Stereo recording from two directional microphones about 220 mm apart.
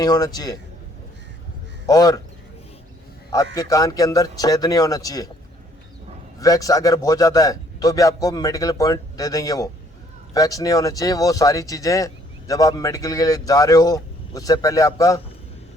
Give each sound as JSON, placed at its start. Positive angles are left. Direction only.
{"t": 0.0, "sound": "speech", "side_deg": 15}
{"t": 1.9, "sound": "speech", "side_deg": 15}
{"t": 3.3, "sound": "speech", "side_deg": 15}
{"t": 6.4, "sound": "speech", "side_deg": 15}